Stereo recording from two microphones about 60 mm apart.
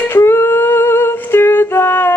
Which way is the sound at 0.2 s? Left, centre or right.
Left.